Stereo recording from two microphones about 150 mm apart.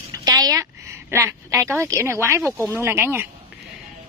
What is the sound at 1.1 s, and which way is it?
A woman's voice, 15° right (ahead or behind).